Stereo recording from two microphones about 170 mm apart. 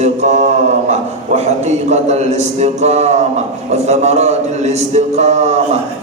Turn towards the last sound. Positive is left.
turn(degrees=-40)  # may be behind; listen again after turning